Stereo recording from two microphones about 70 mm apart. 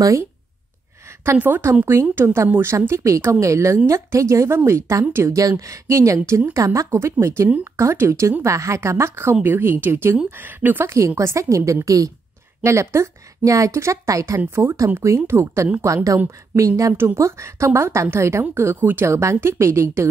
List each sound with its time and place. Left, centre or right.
1.4 s a woman's voice: right
11.0 s a woman's voice: right
16.9 s speech: right